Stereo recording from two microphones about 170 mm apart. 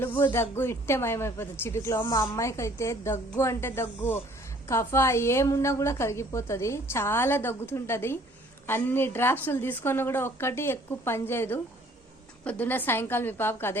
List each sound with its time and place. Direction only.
0.0 s a woman's voice: 10° left (ahead or behind)